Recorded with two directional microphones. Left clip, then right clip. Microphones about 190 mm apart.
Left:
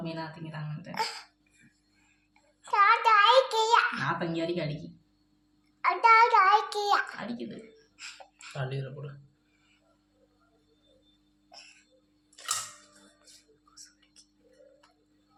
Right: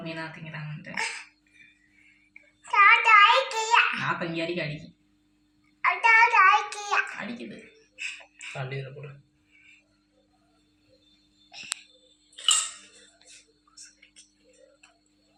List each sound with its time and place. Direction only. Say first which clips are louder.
0.0 s a woman's voice: right 2 dB; 5° left (ahead or behind)
0.9 s speech: right 2 dB; 60° left (ahead or behind)
2.6 s child singing: right 4 dB; 60° left (ahead or behind)
4.0 s a woman's voice: right 2 dB; 10° left (ahead or behind)
5.8 s child singing: right 1 dB; 60° left (ahead or behind)
7.1 s a woman's voice: right 2 dB; 10° left (ahead or behind)
7.9 s a sound: right 10 dB; 65° left (ahead or behind)